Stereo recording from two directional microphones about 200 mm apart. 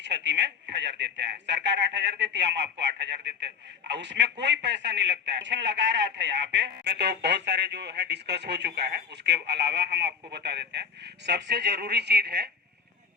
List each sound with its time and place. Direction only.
0.0 s speech: 60° right (ahead or behind)